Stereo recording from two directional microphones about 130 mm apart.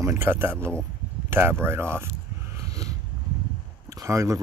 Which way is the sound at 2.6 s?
25° right (ahead or behind).